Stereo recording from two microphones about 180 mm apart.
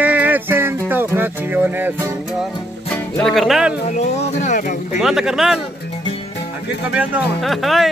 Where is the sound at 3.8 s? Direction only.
40° left (ahead or behind).